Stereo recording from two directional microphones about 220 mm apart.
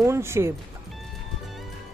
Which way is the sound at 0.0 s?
10° right (ahead or behind).